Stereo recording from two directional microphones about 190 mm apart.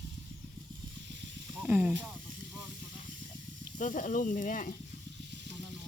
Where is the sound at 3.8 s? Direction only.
45° left (ahead or behind).